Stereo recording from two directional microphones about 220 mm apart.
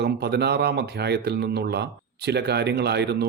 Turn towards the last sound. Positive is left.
turn(degrees=-50)  # may be behind; listen again after turning